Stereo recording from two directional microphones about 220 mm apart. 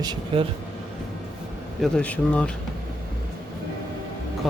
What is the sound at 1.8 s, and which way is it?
Speech, 5° left (ahead or behind).